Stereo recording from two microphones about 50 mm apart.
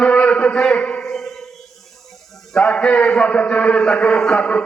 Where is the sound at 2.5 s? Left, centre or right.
Centre.